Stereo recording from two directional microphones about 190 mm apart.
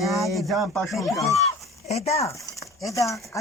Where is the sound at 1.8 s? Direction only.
35° left (ahead or behind).